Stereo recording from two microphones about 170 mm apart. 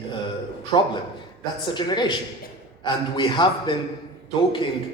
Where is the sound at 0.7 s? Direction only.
25° left (ahead or behind).